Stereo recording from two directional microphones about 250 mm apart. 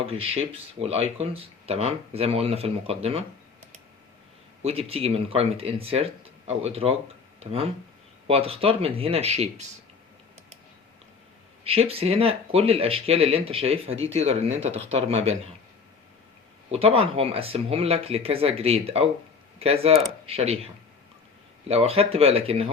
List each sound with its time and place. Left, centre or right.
0.0 s speech: right
4.6 s speech: right
11.6 s speech: right
16.7 s speech: right
21.7 s speech: right